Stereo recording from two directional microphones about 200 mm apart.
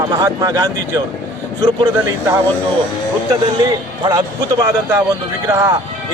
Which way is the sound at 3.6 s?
20° right (ahead or behind).